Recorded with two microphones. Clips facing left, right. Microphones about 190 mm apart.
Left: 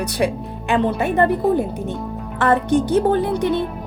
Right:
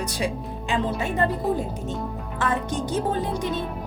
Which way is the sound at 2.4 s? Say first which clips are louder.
Left 9 dB; 65° left (ahead or behind).